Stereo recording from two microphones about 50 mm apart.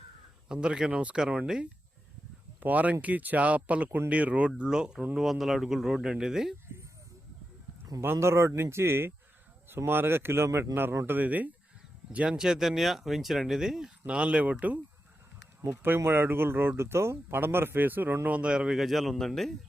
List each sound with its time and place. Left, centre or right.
0.4 s speech: centre
2.6 s speech: right
3.8 s speech: right
4.1 s speech: right; by 6.6 s centre
8.0 s speech: right
11.0 s speech: right
12.1 s speech: right
14.1 s speech: right
15.6 s speech: right
18.3 s speech: centre
18.8 s speech: centre